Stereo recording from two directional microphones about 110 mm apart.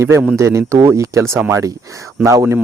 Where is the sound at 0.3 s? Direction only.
25° right (ahead or behind).